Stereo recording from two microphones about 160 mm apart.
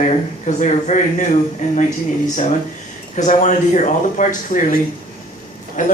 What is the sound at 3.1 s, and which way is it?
Speech, 50° left (ahead or behind).